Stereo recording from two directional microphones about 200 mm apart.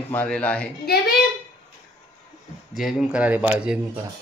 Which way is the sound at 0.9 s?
55° left (ahead or behind).